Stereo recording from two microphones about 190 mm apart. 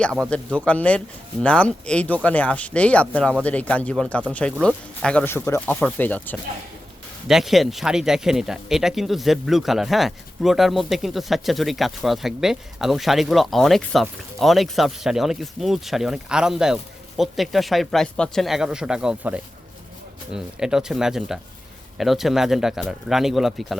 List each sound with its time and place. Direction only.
0.0 s speech: 5° left (ahead or behind)
7.3 s speech: centre (ahead or behind)